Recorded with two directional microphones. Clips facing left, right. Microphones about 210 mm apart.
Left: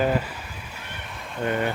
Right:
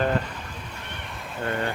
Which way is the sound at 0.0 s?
5° left (ahead or behind).